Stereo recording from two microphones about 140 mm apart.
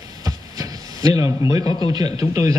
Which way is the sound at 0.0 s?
25° right (ahead or behind).